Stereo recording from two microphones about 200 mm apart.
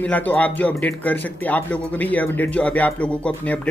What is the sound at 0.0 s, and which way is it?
Speech, 10° left (ahead or behind).